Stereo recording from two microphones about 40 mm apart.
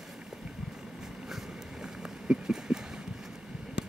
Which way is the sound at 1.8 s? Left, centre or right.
Centre.